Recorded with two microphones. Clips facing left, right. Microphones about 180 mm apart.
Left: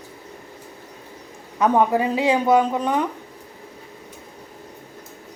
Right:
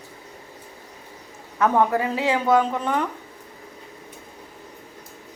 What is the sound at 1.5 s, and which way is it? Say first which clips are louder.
A woman's voice: left 2 dB; 15° left (ahead or behind).